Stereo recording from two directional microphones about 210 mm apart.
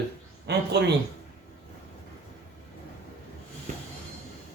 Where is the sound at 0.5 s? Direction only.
50° right (ahead or behind).